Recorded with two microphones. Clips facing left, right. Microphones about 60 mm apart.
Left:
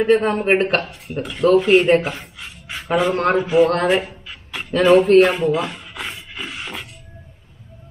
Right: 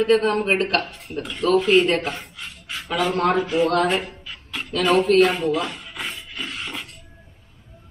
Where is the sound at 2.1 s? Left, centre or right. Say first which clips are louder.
Even; centre.